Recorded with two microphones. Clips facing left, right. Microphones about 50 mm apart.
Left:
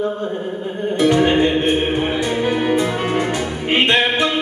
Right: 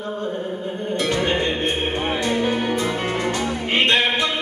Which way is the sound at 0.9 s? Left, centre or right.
Centre.